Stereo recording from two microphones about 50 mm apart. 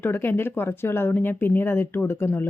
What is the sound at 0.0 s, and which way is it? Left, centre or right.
Speech, left.